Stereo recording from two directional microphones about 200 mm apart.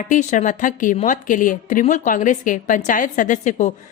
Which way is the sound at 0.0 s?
40° left (ahead or behind).